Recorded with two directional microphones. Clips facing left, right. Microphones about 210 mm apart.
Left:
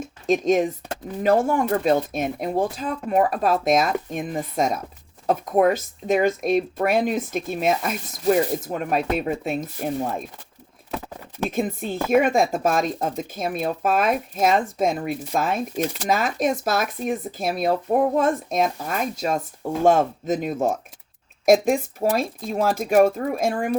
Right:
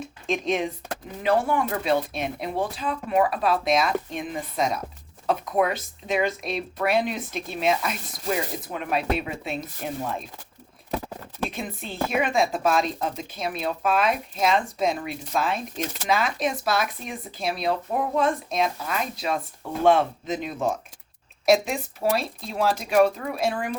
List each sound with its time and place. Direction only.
0.0 s a woman's voice: 45° left (ahead or behind)
11.4 s a woman's voice: 45° left (ahead or behind)